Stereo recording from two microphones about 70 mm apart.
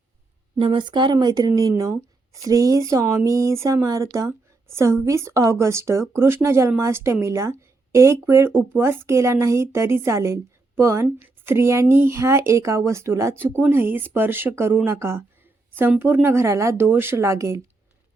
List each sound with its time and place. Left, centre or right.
0.9 s speech: right
1.9 s speech: right